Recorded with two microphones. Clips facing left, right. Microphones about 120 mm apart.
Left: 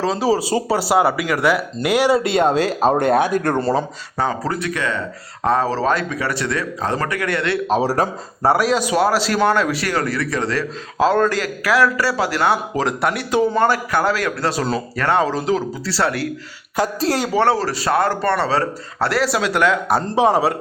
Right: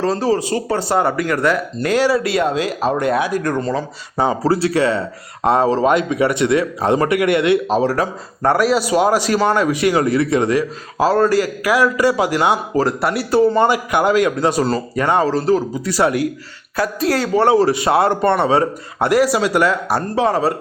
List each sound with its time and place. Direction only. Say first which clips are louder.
0.0 s speech: right 1 dB; 5° left (ahead or behind)
2.1 s speech: left 1 dB; 25° left (ahead or behind)
3.3 s speech: left 1 dB; 60° left (ahead or behind)
3.6 s speech: left 2 dB; 30° left (ahead or behind)
4.2 s speech: right 5 dB; 25° right (ahead or behind)
8.4 s speech: right 1 dB; 5° left (ahead or behind)
9.0 s a man's voice: right 1 dB; 15° right (ahead or behind)
12.7 s speech: right 3 dB; centre (ahead or behind)
13.6 s a man's voice: right 2 dB; 15° right (ahead or behind)
16.7 s speech: right 1 dB; 25° left (ahead or behind)
17.4 s a man's voice: right 4 dB; 20° right (ahead or behind); by 20.0 s 5° right (ahead or behind)
20.1 s speech: left 2 dB; 15° left (ahead or behind)